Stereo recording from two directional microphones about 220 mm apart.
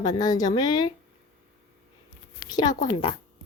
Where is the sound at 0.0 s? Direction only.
15° left (ahead or behind).